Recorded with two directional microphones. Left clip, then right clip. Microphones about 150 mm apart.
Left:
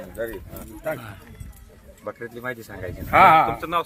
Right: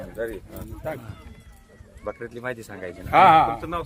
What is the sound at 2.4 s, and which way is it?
Speech, 40° right (ahead or behind).